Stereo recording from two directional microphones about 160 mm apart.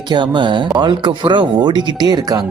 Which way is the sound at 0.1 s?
30° right (ahead or behind).